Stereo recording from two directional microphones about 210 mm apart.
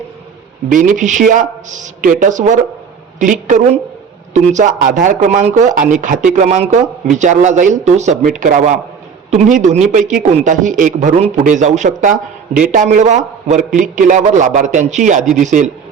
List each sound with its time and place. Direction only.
0.7 s speech: 35° right (ahead or behind)